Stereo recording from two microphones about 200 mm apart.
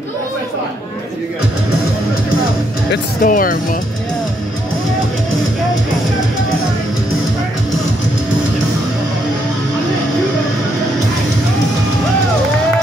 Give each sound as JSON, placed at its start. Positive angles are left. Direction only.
{"t": 3.2, "sound": "speech", "side_deg": 45}